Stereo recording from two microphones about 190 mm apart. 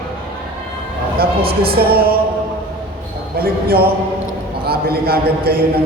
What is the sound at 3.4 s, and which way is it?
A man's voice, 55° right (ahead or behind).